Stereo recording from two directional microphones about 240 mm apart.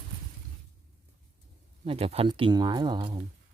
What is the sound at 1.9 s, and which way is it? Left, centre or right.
Speech, right.